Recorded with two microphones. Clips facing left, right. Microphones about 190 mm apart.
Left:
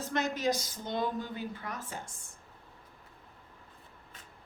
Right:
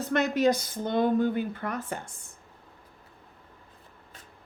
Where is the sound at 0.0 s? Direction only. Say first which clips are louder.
Right 7 dB; 65° right (ahead or behind).